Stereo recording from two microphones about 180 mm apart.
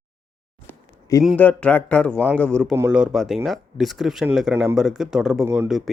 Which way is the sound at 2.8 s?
10° right (ahead or behind).